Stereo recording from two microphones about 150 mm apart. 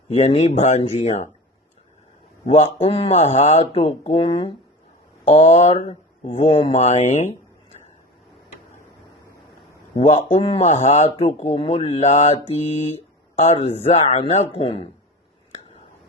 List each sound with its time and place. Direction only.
0.1 s speech: 45° left (ahead or behind)
2.7 s speech: 40° left (ahead or behind)
5.3 s speech: 45° left (ahead or behind)
9.9 s speech: 40° left (ahead or behind)
10.7 s speech: 55° left (ahead or behind)